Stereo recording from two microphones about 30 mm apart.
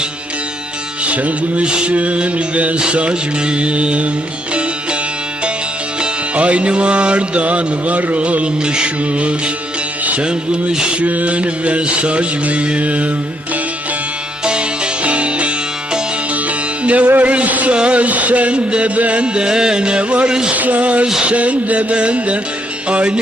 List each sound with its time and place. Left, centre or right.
1.0 s music: right
1.6 s speech: right
1.9 s mantra: right
2.7 s speech: right
6.3 s speech: right
8.2 s mantra: right
8.6 s speech: right
11.0 s mantra: right
15.0 s music: right
16.8 s music: right
17.7 s mantra: right
19.2 s speech: right
20.5 s mantra: right
22.9 s speech: right